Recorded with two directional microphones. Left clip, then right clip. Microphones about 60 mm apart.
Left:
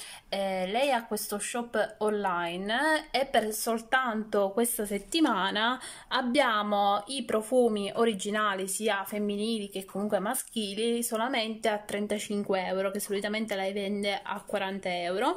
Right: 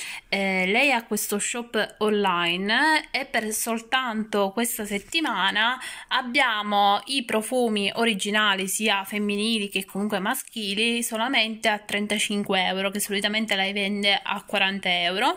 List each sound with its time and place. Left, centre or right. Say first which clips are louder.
0.3 s speech: right 6 dB; centre
4.6 s a woman's voice: right 2 dB; left
5.1 s a woman's voice: right 4 dB; left